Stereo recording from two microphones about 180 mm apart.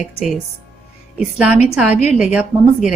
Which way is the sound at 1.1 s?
5° right (ahead or behind).